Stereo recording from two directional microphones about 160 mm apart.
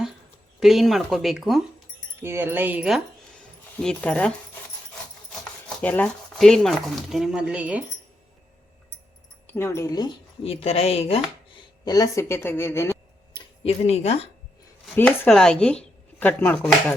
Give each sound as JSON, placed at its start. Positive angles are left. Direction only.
{"t": 0.6, "sound": "speech", "side_deg": 0}
{"t": 2.2, "sound": "speech", "side_deg": -15}
{"t": 3.8, "sound": "speech", "side_deg": 5}
{"t": 5.3, "sound": "speech", "side_deg": 5}
{"t": 9.5, "sound": "speech", "side_deg": 15}
{"t": 10.4, "sound": "speech", "side_deg": 40}
{"t": 11.9, "sound": "speech", "side_deg": 20}
{"t": 13.3, "sound": "a sound", "side_deg": 30}
{"t": 13.8, "sound": "speech", "side_deg": 40}
{"t": 14.9, "sound": "speech", "side_deg": 10}